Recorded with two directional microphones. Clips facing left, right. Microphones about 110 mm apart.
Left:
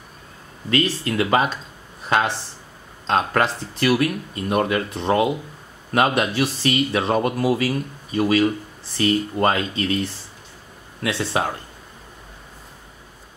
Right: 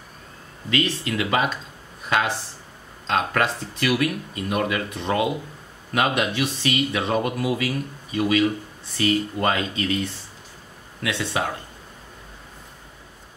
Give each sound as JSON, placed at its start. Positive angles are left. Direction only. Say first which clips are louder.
{"t": 0.7, "sound": "speech", "louder": "left 3 dB", "side_deg": 40}
{"t": 11.0, "sound": "speech", "louder": "left 3 dB", "side_deg": 35}